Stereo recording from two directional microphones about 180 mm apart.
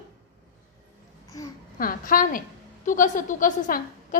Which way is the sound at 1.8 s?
50° left (ahead or behind).